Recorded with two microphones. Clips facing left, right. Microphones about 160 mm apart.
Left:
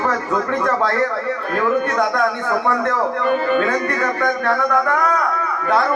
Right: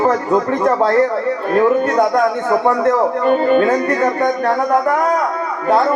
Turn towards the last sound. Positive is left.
turn(degrees=-30)  # may be behind; listen again after turning